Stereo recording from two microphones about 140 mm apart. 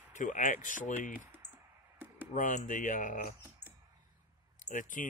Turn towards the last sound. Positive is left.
turn(degrees=65)  # may be behind; listen again after turning